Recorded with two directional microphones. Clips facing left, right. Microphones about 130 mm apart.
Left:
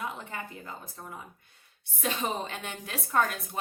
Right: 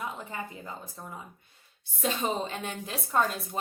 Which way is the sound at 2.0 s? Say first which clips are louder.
Right 2 dB; 30° right (ahead or behind).